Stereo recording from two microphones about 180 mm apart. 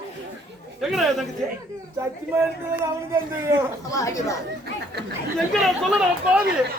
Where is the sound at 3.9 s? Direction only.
20° left (ahead or behind).